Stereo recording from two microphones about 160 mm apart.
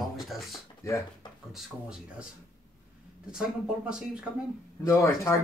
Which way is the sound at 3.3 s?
5° right (ahead or behind).